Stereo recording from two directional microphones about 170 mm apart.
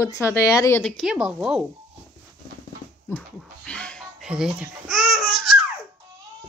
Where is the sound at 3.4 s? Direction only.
5° left (ahead or behind).